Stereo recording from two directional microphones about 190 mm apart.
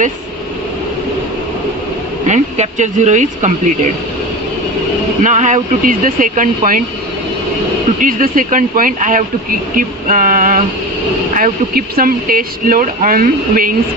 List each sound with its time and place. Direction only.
2.2 s speech: 35° right (ahead or behind)
5.2 s speech: 40° right (ahead or behind)
8.0 s speech: 45° right (ahead or behind)